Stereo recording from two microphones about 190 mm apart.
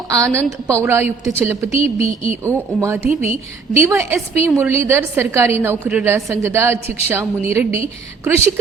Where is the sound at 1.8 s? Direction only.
30° left (ahead or behind).